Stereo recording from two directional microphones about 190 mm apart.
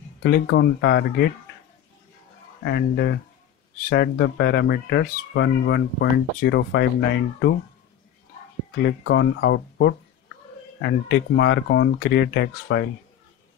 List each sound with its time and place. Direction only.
0.2 s speech: 65° left (ahead or behind)
2.6 s speech: 60° left (ahead or behind)
8.8 s speech: 65° left (ahead or behind)